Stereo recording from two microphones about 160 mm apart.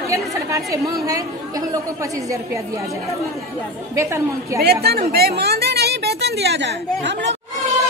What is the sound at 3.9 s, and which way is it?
Speech, 20° right (ahead or behind).